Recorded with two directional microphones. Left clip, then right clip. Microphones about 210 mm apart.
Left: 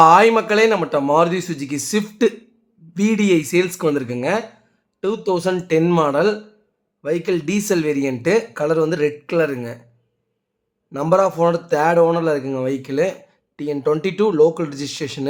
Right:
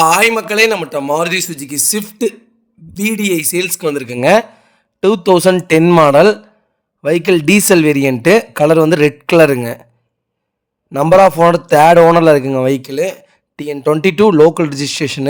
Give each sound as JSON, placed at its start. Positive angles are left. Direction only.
{"t": 0.0, "sound": "speech", "side_deg": 0}
{"t": 0.6, "sound": "speech", "side_deg": -45}
{"t": 1.7, "sound": "speech", "side_deg": 0}
{"t": 3.0, "sound": "speech", "side_deg": 0}
{"t": 3.7, "sound": "speech", "side_deg": -40}
{"t": 10.9, "sound": "a man's voice", "side_deg": -40}